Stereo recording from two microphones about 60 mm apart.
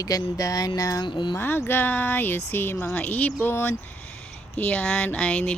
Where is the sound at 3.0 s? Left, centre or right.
Left.